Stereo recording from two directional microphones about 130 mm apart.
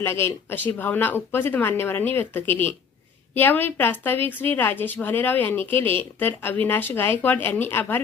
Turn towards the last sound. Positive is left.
turn(degrees=15)  # may be behind; listen again after turning